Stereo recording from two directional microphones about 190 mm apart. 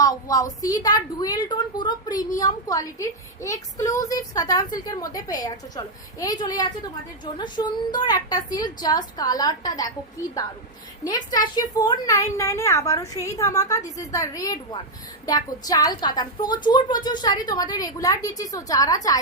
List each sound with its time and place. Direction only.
0.0 s a woman's voice: 20° left (ahead or behind)
11.0 s a woman's voice: 20° left (ahead or behind)